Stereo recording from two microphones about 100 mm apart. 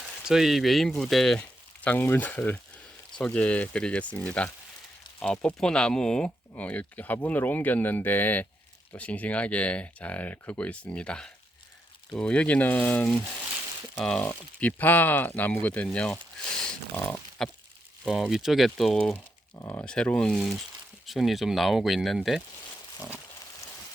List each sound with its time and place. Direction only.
0.3 s speech: 5° right (ahead or behind); by 13.1 s 15° left (ahead or behind)
14.2 s speech: 15° left (ahead or behind)
17.1 s a sound: 10° left (ahead or behind)
18.1 s speech: 5° right (ahead or behind)
19.5 s speech: 25° left (ahead or behind)
19.8 s speech: 10° left (ahead or behind)
23.0 s pig: 15° right (ahead or behind)